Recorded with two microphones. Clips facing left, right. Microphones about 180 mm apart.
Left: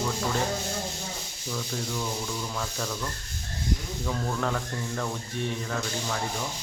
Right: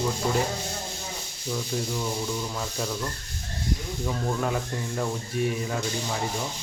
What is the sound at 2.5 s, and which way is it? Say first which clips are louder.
Speech: right 2 dB; 15° right (ahead or behind).